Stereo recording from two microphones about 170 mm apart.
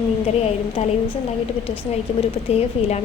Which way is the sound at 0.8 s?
40° left (ahead or behind).